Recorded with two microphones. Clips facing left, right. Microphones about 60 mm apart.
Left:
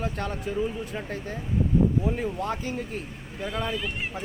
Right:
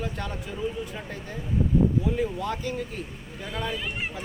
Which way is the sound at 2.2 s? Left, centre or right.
Left.